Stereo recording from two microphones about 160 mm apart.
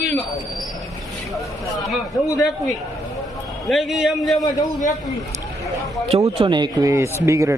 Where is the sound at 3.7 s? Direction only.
Centre (ahead or behind).